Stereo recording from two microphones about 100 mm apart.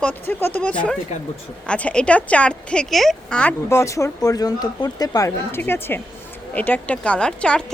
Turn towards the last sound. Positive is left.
turn(degrees=10)  # may be behind; listen again after turning